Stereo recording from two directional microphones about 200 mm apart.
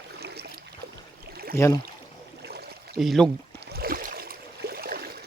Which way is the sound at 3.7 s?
50° right (ahead or behind).